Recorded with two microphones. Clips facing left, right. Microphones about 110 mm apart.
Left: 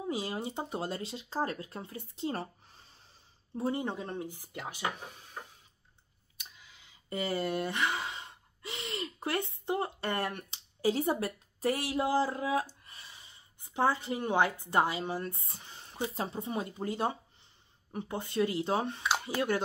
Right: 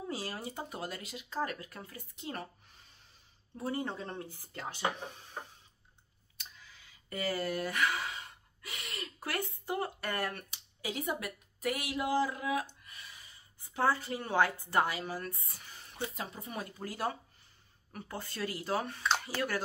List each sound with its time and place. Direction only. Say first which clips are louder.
0.1 s speech: left 6 dB; 20° left (ahead or behind)
6.6 s speech: even; 20° left (ahead or behind)